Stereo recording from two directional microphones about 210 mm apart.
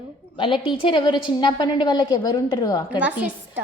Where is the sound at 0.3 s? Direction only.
25° left (ahead or behind).